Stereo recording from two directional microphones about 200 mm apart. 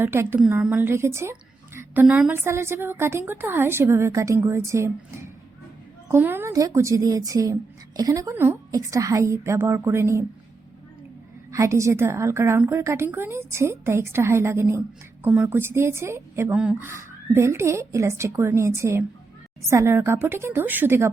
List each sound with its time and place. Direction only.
0.0 s a woman's voice: 10° right (ahead or behind)
11.5 s a woman's voice: 15° right (ahead or behind)